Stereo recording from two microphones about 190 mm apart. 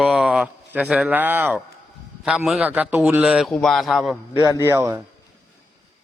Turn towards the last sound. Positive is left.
turn(degrees=-15)  # may be behind; listen again after turning